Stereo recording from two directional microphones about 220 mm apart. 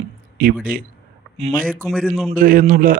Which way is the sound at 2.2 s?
40° right (ahead or behind).